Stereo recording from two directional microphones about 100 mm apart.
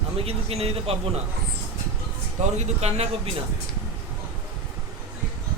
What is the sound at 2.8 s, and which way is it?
Speech, 90° right.